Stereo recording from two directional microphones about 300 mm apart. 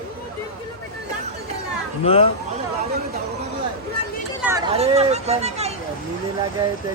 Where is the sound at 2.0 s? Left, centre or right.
Centre.